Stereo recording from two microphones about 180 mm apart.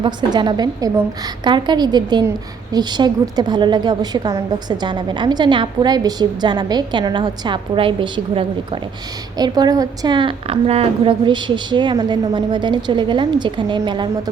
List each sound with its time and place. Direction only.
0.0 s a woman's voice: 25° right (ahead or behind)